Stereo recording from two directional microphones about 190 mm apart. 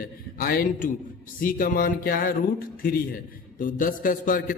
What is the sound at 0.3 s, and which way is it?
A man's voice, 50° left (ahead or behind).